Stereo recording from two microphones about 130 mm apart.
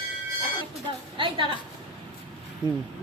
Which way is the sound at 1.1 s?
40° right (ahead or behind).